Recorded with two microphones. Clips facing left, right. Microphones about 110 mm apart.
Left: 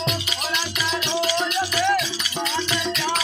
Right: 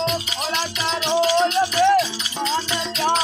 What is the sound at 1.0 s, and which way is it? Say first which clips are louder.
Music: right 8 dB; 45° right (ahead or behind).